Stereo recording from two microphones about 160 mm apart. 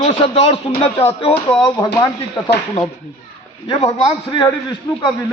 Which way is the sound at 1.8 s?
20° left (ahead or behind).